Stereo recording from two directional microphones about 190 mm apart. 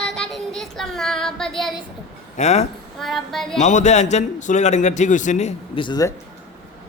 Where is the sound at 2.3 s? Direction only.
35° left (ahead or behind).